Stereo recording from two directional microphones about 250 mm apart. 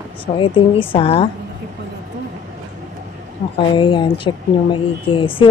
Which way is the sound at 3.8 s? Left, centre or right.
Centre.